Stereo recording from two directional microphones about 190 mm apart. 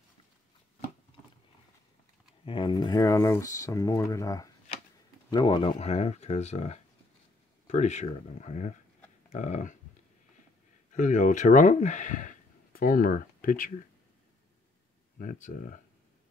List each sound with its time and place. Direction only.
2.4 s speech: 25° left (ahead or behind)
10.9 s speech: 40° left (ahead or behind)
15.1 s speech: 45° left (ahead or behind)